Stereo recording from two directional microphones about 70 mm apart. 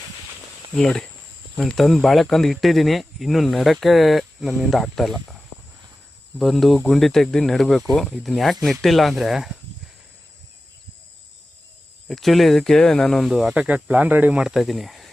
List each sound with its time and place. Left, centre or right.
0.7 s speech: centre
6.4 s speech: centre
12.0 s speech: centre
13.2 s speech: centre
13.5 s speech: centre
14.3 s speech: centre